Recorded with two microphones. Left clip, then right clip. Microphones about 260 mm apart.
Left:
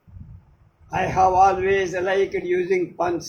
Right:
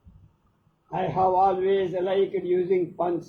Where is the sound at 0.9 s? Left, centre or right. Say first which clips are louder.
Left 5 dB; left.